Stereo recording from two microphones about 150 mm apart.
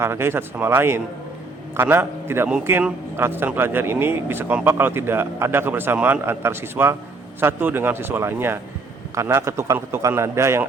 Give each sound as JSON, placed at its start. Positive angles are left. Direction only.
{"t": 0.0, "sound": "a man's voice", "side_deg": -15}